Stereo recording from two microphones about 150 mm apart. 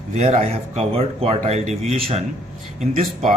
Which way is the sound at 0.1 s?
50° right (ahead or behind).